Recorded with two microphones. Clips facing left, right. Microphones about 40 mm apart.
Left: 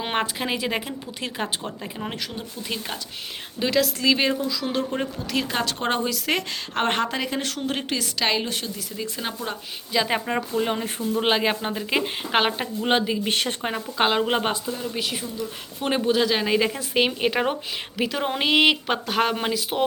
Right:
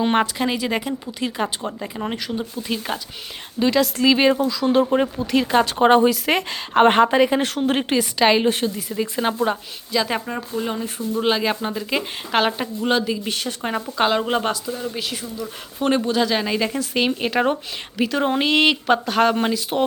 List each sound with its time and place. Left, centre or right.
0.2 s speech: centre
1.2 s a woman's voice: centre
4.7 s a woman's voice: right
5.3 s a woman's voice: centre
5.8 s a woman's voice: right
7.9 s a woman's voice: centre
9.9 s speech: centre
10.8 s speech: left
11.2 s speech: left
11.6 s speech: centre
12.9 s speech: left
13.3 s speech: left
13.9 s speech: centre
14.7 s speech: centre